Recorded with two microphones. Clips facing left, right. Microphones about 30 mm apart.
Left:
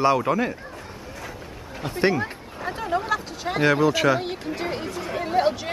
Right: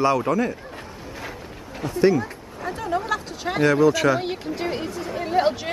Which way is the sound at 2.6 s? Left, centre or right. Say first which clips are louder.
Even; centre.